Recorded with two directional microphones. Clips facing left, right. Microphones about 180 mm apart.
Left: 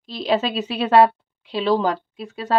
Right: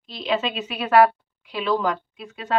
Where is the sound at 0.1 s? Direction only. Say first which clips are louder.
Left 4 dB; 35° left (ahead or behind).